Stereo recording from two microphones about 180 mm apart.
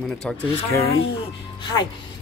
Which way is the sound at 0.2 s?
5° left (ahead or behind).